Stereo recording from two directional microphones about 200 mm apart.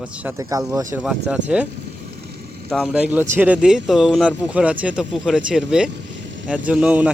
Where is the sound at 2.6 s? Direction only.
Centre (ahead or behind).